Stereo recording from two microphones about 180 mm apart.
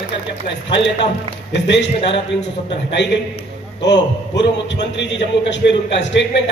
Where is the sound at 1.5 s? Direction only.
75° left (ahead or behind).